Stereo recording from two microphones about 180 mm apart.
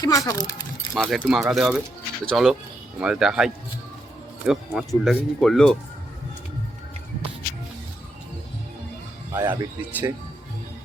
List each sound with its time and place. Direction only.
0.0 s speech: 20° left (ahead or behind)
0.9 s speech: centre (ahead or behind)
9.3 s speech: 20° right (ahead or behind)